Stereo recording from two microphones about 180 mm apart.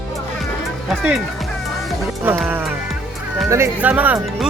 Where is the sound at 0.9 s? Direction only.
5° right (ahead or behind).